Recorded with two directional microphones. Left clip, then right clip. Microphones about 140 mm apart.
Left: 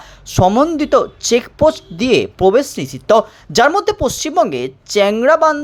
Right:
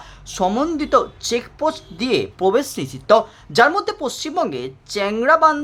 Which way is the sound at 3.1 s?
30° left (ahead or behind).